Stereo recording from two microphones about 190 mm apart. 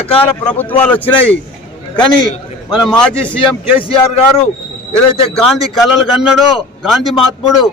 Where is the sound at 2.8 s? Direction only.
5° left (ahead or behind).